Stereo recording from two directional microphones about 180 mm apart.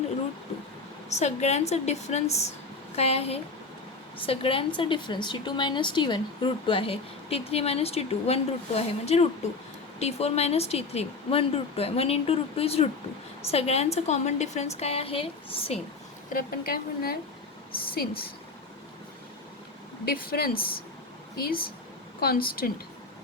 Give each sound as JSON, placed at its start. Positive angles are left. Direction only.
{"t": 1.1, "sound": "a woman's voice", "side_deg": 40}
{"t": 16.3, "sound": "a woman's voice", "side_deg": 55}
{"t": 20.1, "sound": "a woman's voice", "side_deg": 55}